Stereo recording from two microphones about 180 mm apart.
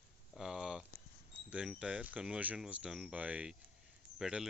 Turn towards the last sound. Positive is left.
turn(degrees=-5)  # may be behind; listen again after turning